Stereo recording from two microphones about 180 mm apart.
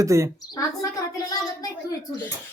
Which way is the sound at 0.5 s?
20° left (ahead or behind).